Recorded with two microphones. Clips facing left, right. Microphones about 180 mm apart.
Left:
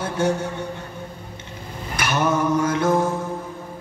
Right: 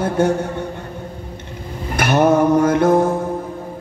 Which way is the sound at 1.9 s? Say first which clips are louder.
Right 7 dB; 55° right (ahead or behind).